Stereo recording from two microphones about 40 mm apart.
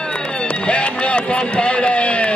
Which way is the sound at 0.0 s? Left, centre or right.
Left.